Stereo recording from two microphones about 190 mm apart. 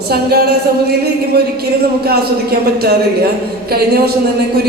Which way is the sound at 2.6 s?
55° right (ahead or behind).